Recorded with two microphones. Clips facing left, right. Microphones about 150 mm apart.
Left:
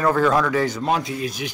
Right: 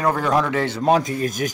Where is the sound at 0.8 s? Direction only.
45° right (ahead or behind).